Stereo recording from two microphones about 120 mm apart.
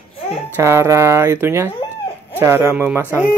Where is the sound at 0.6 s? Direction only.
20° right (ahead or behind).